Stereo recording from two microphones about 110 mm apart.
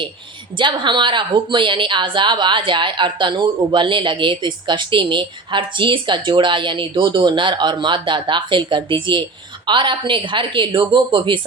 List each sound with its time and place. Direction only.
0.6 s a woman's voice: 45° right (ahead or behind)